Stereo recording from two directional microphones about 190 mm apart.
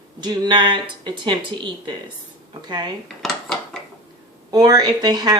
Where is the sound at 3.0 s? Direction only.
Centre (ahead or behind).